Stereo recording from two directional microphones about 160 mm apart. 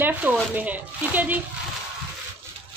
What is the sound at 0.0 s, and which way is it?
Speech, 10° right (ahead or behind).